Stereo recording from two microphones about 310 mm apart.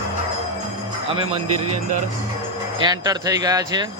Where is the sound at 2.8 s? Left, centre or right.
Centre.